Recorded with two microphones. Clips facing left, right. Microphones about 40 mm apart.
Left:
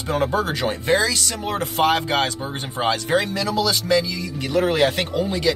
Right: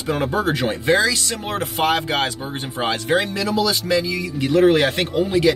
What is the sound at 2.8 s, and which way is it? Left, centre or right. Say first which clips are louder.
Speech: even; centre.